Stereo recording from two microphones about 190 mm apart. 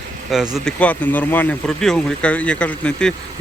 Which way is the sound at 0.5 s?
5° left (ahead or behind).